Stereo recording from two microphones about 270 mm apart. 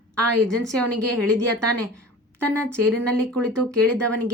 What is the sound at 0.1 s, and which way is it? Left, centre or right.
Speech, right.